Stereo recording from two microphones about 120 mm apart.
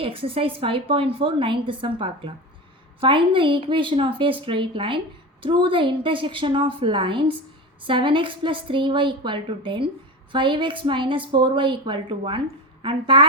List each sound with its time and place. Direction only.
0.0 s a woman's voice: 50° right (ahead or behind)